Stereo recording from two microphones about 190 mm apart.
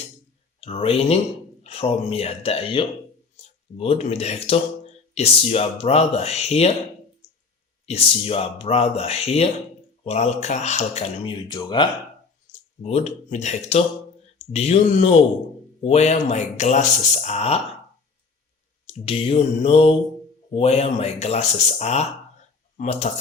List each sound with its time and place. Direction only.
0.6 s speech: 30° left (ahead or behind)
7.9 s speech: 30° left (ahead or behind)
11.3 s mantra: 20° left (ahead or behind)
12.5 s speech: 35° left (ahead or behind)
18.9 s mantra: 30° left (ahead or behind)
20.5 s speech: 30° left (ahead or behind)